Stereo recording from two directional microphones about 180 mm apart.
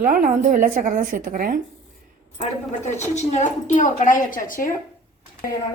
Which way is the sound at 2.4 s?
40° left (ahead or behind).